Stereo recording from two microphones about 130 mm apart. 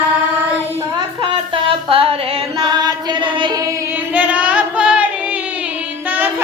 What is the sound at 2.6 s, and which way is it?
Music, 35° right (ahead or behind).